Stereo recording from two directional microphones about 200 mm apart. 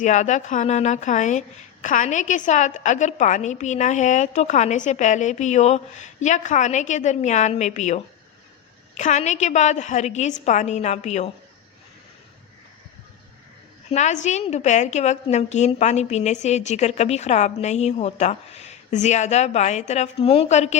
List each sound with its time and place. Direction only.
0.0 s a woman's voice: 35° left (ahead or behind)
13.9 s a woman's voice: 35° left (ahead or behind)